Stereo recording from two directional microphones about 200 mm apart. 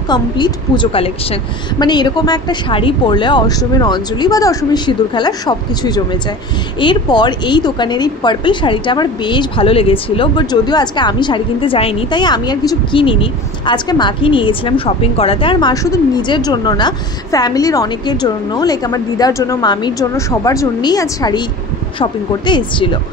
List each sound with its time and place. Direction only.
0.1 s speech: 25° left (ahead or behind)